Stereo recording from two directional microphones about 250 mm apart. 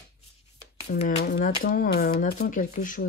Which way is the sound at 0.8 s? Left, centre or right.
Left.